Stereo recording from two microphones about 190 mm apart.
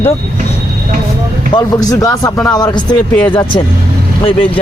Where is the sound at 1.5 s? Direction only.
20° left (ahead or behind).